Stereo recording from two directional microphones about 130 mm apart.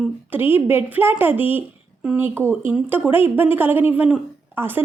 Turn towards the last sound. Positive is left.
turn(degrees=-15)  # may be behind; listen again after turning